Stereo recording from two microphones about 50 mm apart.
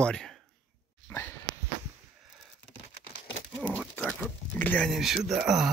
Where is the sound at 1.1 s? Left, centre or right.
Left.